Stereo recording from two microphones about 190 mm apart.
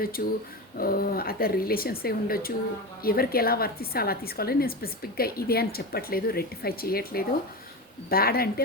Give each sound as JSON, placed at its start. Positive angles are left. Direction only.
{"t": 0.2, "sound": "a woman's voice", "side_deg": 50}